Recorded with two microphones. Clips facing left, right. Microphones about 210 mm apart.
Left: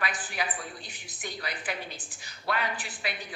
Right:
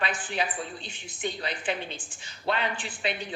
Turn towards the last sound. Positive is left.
turn(degrees=-25)  # may be behind; listen again after turning